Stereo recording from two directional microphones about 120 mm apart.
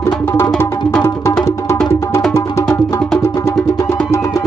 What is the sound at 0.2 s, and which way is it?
Music, 20° left (ahead or behind).